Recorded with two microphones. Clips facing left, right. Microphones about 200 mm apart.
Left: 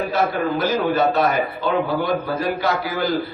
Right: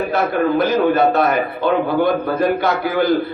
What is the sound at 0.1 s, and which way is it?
A man's voice, 55° right (ahead or behind).